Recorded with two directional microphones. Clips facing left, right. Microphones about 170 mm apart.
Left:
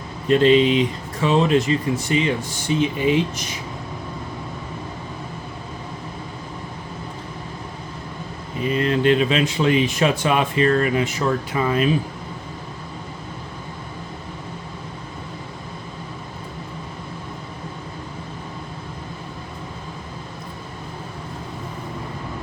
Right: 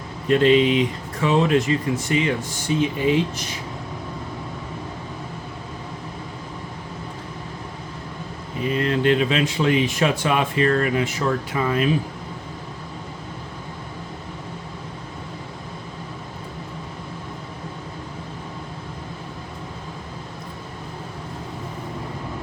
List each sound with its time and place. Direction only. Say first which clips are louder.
0.3 s speech: left 1 dB; 30° left (ahead or behind)
8.6 s speech: left 2 dB; 20° left (ahead or behind)